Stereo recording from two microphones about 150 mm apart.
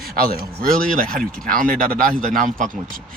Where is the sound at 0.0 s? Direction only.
90° right.